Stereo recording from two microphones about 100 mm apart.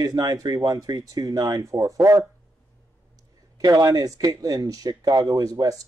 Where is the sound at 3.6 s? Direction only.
35° right (ahead or behind).